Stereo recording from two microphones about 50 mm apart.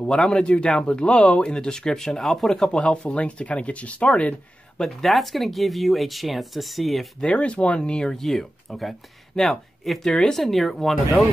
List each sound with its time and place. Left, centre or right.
0.0 s a man's voice: centre
2.7 s speech: left
4.7 s speech: centre
7.2 s speech: left
8.1 s speech: centre